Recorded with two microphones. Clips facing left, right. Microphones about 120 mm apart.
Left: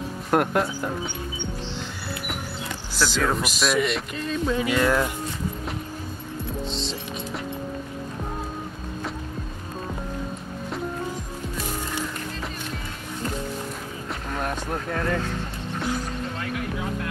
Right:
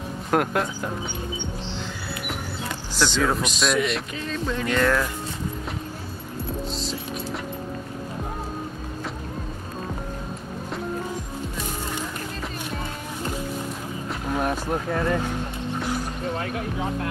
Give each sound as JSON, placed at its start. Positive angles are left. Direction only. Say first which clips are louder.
{"t": 0.3, "sound": "speech", "louder": "left 1 dB", "side_deg": 0}
{"t": 3.0, "sound": "speech", "louder": "right 1 dB", "side_deg": 0}
{"t": 6.7, "sound": "music", "louder": "even", "side_deg": -5}
{"t": 14.2, "sound": "speech", "louder": "right 4 dB", "side_deg": -10}
{"t": 16.3, "sound": "basketball bounce", "louder": "right 2 dB", "side_deg": -35}